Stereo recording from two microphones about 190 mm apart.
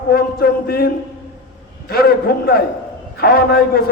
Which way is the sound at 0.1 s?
55° left (ahead or behind).